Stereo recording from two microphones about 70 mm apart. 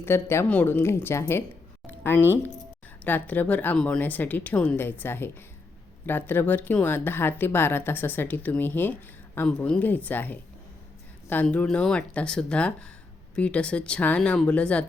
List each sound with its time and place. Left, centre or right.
0.0 s speech: left
0.4 s speech: left
3.0 s speech: left
11.5 s speech: centre